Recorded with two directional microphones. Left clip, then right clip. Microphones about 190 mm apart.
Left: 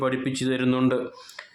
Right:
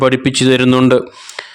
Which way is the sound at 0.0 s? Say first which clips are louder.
Right 14 dB; 50° right (ahead or behind).